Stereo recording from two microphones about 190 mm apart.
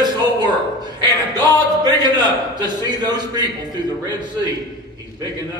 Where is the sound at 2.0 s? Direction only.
20° right (ahead or behind).